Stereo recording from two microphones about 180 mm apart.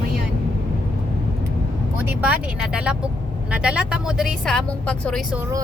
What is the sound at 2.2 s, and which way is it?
A woman's voice, 5° right (ahead or behind).